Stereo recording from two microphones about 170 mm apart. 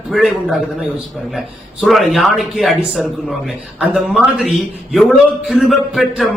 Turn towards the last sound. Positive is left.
turn(degrees=0)  # may be behind; listen again after turning